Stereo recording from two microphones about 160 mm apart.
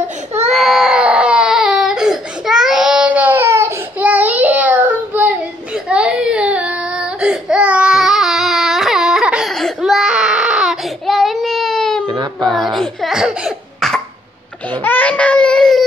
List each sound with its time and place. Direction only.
0.5 s baby cry: centre (ahead or behind)
12.1 s child singing: 25° right (ahead or behind)
12.5 s cough: centre (ahead or behind)
14.8 s baby cry: 10° left (ahead or behind)